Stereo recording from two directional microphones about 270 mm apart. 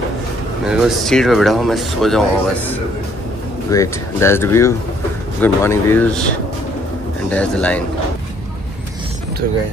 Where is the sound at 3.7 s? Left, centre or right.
Centre.